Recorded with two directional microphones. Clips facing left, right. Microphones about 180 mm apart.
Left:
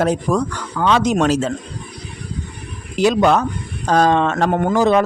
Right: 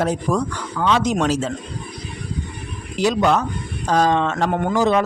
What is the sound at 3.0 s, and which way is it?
Speech, 60° left (ahead or behind).